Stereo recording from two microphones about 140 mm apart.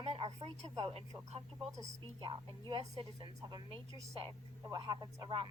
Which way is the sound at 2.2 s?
35° right (ahead or behind).